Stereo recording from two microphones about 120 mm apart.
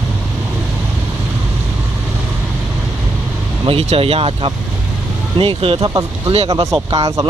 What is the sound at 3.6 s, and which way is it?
Speech, 50° right (ahead or behind).